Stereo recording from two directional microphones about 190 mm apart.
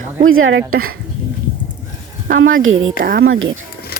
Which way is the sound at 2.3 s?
90° right.